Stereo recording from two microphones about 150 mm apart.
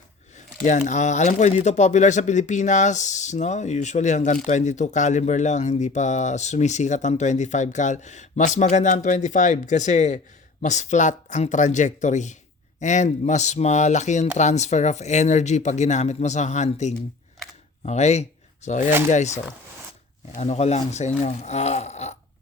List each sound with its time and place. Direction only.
0.9 s speech: 50° left (ahead or behind)